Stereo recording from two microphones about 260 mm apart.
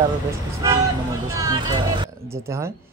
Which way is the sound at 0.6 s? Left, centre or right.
Centre.